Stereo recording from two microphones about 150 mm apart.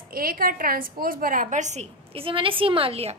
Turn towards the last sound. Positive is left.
turn(degrees=-40)  # may be behind; listen again after turning